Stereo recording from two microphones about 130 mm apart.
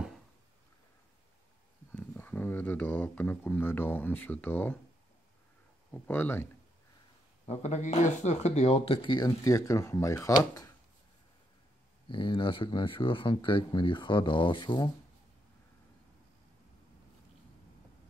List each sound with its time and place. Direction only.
1.9 s speech: 15° left (ahead or behind)
5.9 s speech: 15° left (ahead or behind)
7.4 s speech: 55° left (ahead or behind); by 10.7 s 25° left (ahead or behind)
12.1 s speech: 40° left (ahead or behind)